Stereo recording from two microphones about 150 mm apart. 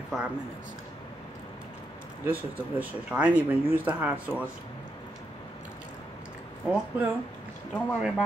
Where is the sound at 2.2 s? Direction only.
10° right (ahead or behind).